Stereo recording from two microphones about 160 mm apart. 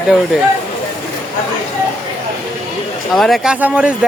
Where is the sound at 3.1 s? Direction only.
Centre (ahead or behind).